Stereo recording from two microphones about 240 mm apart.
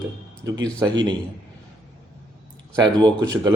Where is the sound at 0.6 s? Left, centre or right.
Centre.